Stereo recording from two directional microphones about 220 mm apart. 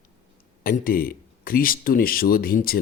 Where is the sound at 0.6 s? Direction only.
40° left (ahead or behind).